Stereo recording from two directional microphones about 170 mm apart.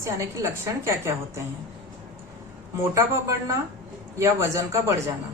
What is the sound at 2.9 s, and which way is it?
A woman's voice, 20° right (ahead or behind).